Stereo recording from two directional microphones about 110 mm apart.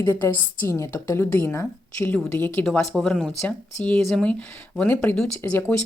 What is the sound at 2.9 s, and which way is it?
Speech, 5° left (ahead or behind).